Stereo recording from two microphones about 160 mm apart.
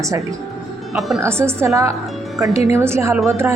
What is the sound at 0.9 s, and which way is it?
Speech, centre (ahead or behind).